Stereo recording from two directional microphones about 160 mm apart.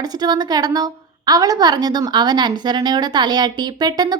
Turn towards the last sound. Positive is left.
turn(degrees=-25)  # may be behind; listen again after turning